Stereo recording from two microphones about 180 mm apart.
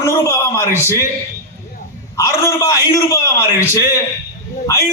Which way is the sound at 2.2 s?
15° left (ahead or behind).